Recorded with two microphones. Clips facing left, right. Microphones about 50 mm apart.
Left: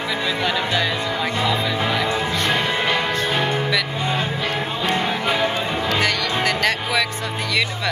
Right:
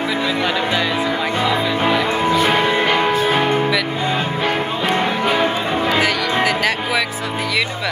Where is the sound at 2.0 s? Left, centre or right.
Right.